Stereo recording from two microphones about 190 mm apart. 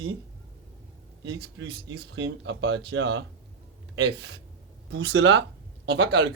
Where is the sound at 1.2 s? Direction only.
70° right (ahead or behind).